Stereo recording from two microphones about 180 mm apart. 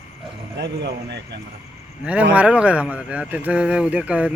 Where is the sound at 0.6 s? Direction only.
70° right (ahead or behind).